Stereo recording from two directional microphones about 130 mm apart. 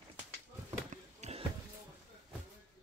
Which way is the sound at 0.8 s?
60° right (ahead or behind).